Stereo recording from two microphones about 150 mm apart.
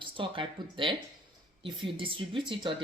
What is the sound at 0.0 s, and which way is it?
A woman's voice, 35° right (ahead or behind).